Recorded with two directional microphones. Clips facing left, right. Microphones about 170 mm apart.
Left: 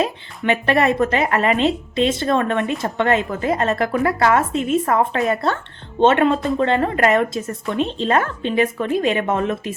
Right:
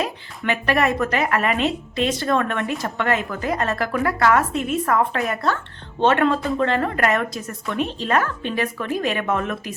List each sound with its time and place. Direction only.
0.0 s speech: 25° left (ahead or behind)